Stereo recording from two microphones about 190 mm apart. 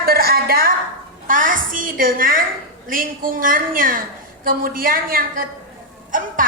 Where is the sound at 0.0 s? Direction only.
50° right (ahead or behind).